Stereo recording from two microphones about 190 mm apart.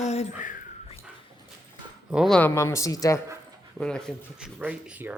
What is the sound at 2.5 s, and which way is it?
Speech, 15° left (ahead or behind).